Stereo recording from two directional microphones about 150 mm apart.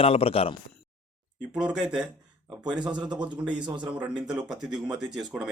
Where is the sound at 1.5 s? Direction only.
5° right (ahead or behind).